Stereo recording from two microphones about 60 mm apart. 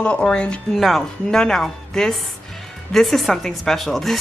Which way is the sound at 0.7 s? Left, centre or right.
Centre.